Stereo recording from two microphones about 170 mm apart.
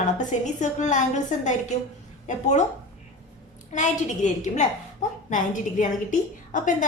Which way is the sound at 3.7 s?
45° left (ahead or behind).